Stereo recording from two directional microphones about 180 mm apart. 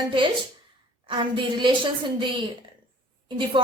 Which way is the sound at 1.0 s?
25° right (ahead or behind).